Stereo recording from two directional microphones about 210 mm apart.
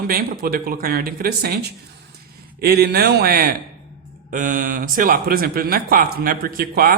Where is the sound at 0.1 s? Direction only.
45° right (ahead or behind).